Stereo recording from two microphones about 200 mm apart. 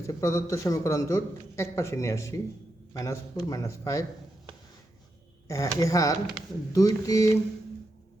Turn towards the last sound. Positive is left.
turn(degrees=15)  # may be behind; listen again after turning